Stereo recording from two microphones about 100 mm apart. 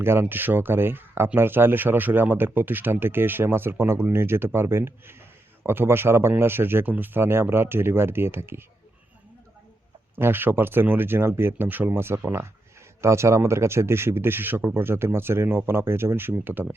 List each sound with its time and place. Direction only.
0.0 s speech: 25° right (ahead or behind)
10.2 s speech: 20° right (ahead or behind)